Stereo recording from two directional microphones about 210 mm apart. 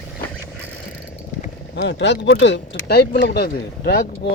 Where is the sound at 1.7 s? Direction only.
55° left (ahead or behind).